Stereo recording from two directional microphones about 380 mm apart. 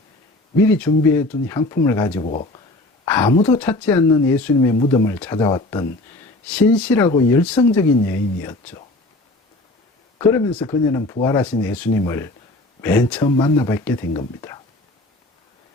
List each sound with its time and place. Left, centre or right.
0.8 s speech: centre
2.2 s speech: centre
10.2 s speech: centre